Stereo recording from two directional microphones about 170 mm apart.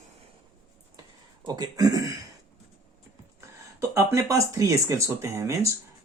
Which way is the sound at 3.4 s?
15° right (ahead or behind).